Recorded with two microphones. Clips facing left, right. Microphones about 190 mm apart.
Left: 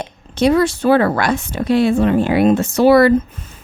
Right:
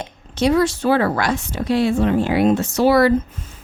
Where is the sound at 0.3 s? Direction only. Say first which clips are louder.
Left 3 dB; 55° left (ahead or behind).